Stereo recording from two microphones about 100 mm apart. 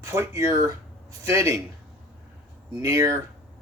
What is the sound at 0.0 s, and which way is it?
Speech, 30° right (ahead or behind).